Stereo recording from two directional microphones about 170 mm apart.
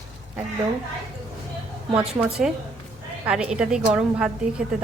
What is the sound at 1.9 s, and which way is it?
A woman's voice, 5° right (ahead or behind).